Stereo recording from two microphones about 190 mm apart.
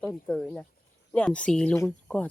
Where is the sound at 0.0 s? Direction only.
5° left (ahead or behind).